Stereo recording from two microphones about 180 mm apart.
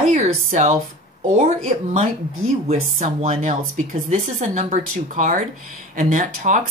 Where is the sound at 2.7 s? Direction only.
40° right (ahead or behind).